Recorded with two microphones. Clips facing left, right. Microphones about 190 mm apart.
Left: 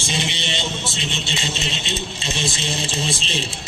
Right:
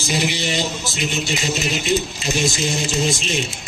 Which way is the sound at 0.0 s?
25° left (ahead or behind).